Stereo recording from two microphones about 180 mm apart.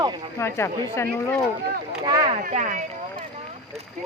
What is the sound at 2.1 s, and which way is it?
Speech, 25° right (ahead or behind).